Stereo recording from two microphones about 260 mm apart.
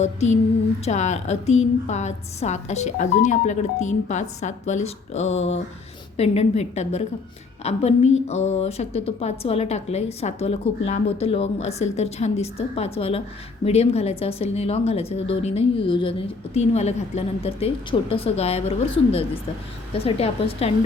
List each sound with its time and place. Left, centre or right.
0.0 s a woman's voice: left
19.9 s a woman's voice: left